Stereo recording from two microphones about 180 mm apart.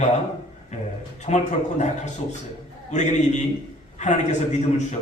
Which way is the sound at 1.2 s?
40° left (ahead or behind).